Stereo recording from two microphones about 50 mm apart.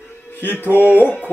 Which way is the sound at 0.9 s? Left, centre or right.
Left.